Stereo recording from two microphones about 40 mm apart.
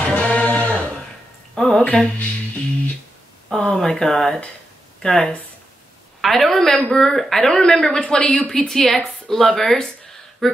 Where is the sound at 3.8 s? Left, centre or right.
Centre.